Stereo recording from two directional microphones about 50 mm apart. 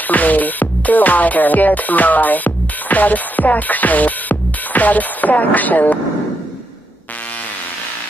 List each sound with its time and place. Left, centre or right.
0.0 s music: left